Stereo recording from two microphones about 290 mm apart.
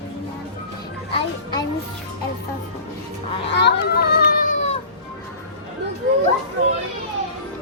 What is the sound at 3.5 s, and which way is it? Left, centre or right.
Cat, left.